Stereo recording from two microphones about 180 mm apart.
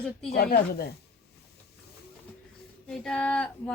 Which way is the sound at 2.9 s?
5° left (ahead or behind).